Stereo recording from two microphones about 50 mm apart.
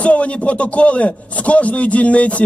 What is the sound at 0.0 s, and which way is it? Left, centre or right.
A man's voice, left.